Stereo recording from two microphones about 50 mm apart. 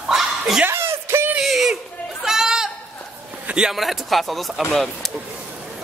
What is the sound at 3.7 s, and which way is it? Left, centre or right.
Speech, centre.